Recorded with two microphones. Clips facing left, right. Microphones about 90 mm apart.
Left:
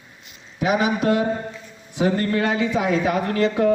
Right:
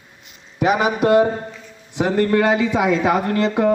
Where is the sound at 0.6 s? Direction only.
55° right (ahead or behind).